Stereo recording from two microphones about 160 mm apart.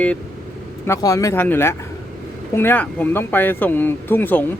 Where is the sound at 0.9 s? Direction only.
20° left (ahead or behind).